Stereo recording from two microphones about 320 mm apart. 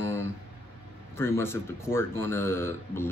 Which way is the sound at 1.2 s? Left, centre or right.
Centre.